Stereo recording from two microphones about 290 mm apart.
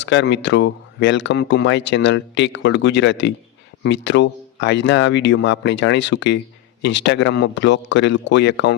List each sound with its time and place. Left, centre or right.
0.0 s speech: left